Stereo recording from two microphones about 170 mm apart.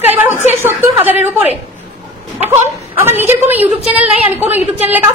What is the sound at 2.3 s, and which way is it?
A woman's voice, 15° right (ahead or behind).